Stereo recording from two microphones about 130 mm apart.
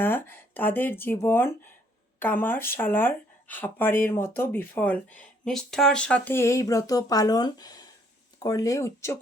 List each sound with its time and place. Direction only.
0.0 s speech: 15° left (ahead or behind)